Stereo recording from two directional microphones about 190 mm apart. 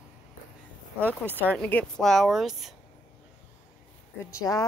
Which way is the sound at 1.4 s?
10° left (ahead or behind).